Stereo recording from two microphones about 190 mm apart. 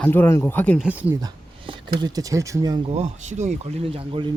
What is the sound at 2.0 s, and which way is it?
Speech, 20° right (ahead or behind).